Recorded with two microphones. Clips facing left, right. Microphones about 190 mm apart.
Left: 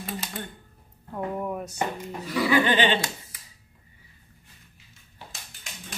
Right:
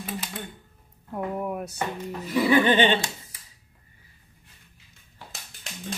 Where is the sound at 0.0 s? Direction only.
Centre (ahead or behind).